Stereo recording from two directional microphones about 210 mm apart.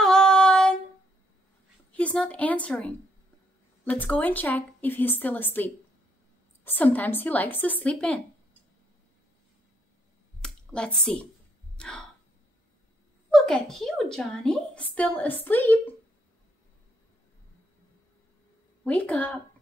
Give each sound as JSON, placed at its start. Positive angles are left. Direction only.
{"t": 0.0, "sound": "female singing", "side_deg": 5}
{"t": 1.9, "sound": "a woman's voice", "side_deg": 5}
{"t": 3.9, "sound": "a woman's voice", "side_deg": 10}
{"t": 10.4, "sound": "a sound", "side_deg": 5}
{"t": 13.3, "sound": "a woman's voice", "side_deg": 0}
{"t": 18.9, "sound": "a woman's voice", "side_deg": 5}